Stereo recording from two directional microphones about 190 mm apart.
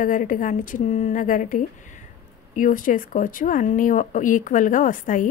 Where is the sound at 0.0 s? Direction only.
45° left (ahead or behind).